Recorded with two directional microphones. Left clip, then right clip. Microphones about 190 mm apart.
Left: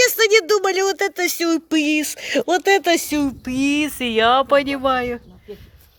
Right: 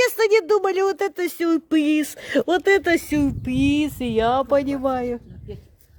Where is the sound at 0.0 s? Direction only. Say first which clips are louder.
Left 3 dB; 15° right (ahead or behind).